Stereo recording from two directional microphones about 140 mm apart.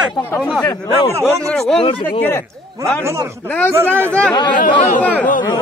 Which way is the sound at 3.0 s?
20° right (ahead or behind).